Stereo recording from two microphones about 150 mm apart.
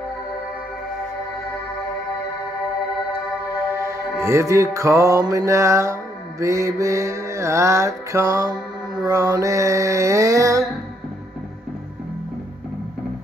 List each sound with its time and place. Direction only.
3.7 s music: 20° right (ahead or behind)
6.4 s mantra: 20° right (ahead or behind)